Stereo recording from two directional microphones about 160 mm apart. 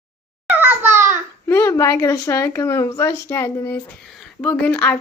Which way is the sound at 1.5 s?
15° left (ahead or behind).